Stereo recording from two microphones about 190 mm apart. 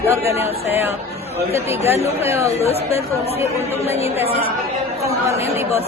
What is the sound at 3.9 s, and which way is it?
A woman's voice, 35° left (ahead or behind).